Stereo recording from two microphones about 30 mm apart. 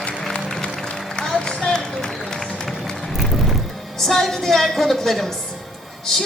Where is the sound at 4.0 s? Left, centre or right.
Centre.